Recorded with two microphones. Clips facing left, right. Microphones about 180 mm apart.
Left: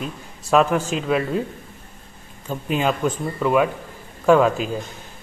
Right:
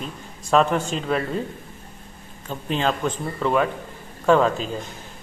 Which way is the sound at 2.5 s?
10° left (ahead or behind).